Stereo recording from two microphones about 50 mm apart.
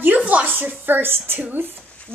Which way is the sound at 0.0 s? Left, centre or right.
Right.